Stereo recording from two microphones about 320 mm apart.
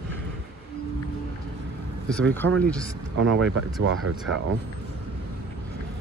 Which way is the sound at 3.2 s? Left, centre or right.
Right.